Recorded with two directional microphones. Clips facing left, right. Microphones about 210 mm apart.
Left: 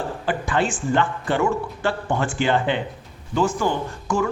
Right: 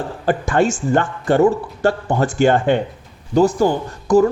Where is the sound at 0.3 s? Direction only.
45° right (ahead or behind).